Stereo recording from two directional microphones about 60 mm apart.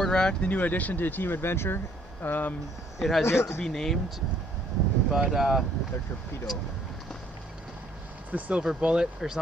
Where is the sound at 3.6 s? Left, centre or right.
Centre.